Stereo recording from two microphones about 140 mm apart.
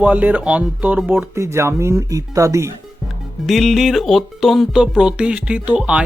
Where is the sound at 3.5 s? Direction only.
Centre (ahead or behind).